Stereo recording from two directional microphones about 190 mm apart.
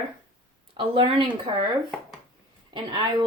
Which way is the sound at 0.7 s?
25° right (ahead or behind).